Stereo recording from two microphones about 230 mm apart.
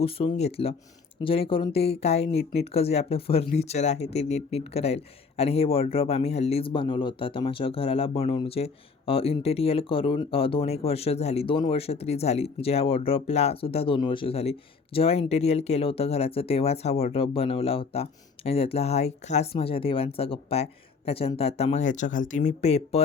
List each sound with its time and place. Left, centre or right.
0.0 s speech: left